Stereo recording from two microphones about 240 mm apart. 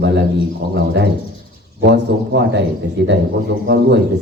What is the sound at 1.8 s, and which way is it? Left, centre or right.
Speech, right.